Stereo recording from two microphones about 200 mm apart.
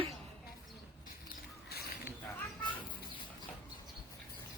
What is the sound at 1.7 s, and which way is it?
Bird, 50° left (ahead or behind).